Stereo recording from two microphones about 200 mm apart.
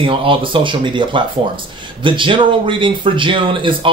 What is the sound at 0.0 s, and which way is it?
Speech, 25° right (ahead or behind).